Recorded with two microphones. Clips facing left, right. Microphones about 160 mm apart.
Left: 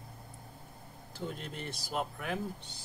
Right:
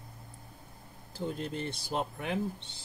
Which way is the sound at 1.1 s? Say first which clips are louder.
Right 5 dB; 30° right (ahead or behind).